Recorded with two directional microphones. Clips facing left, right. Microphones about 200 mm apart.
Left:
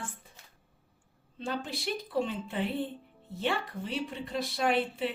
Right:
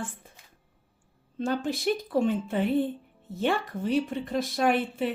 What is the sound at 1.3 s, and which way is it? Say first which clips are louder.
Speech: right 7 dB; 50° right (ahead or behind).